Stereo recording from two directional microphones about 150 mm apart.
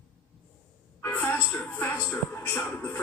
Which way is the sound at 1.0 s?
10° left (ahead or behind).